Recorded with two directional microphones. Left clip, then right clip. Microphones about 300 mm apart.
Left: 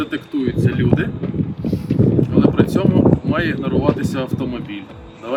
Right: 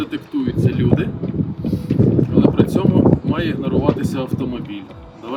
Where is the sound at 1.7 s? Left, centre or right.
Centre.